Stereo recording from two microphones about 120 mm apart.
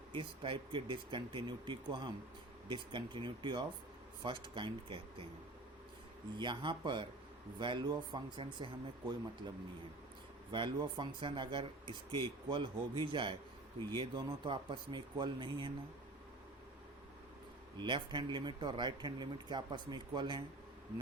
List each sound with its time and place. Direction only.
0.1 s speech: 45° right (ahead or behind)
6.3 s speech: 40° right (ahead or behind)
10.5 s speech: 40° right (ahead or behind)
17.7 s speech: 40° right (ahead or behind)